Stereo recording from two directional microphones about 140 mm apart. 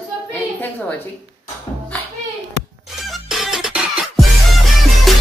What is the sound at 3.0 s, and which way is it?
Music, centre (ahead or behind).